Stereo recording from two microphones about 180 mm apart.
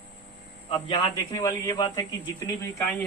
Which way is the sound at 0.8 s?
25° left (ahead or behind).